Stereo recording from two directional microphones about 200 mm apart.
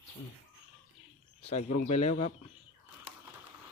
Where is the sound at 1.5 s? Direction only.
35° left (ahead or behind).